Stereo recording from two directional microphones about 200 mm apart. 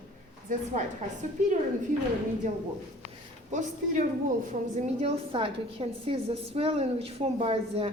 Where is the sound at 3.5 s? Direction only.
40° right (ahead or behind).